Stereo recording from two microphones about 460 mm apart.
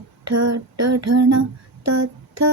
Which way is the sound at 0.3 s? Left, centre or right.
Right.